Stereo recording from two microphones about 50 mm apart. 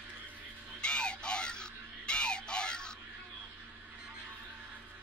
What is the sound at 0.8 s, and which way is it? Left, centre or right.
Music, centre.